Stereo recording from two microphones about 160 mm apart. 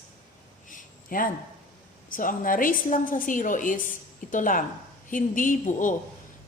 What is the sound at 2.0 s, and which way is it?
A woman's voice, 60° left (ahead or behind).